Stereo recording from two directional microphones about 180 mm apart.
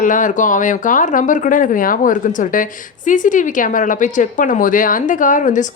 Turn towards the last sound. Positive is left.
turn(degrees=45)  # may be behind; listen again after turning